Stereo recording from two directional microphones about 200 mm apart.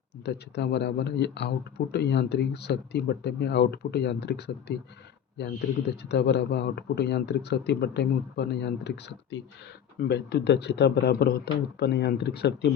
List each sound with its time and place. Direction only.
0.3 s speech: 60° left (ahead or behind)
6.0 s speech: 55° left (ahead or behind)